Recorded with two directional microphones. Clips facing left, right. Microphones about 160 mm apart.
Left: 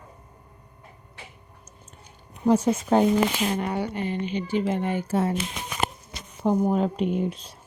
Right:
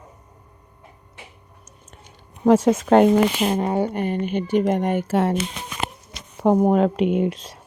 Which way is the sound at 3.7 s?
50° right (ahead or behind).